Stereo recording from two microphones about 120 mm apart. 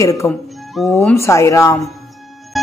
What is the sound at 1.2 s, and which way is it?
Speech, 25° left (ahead or behind).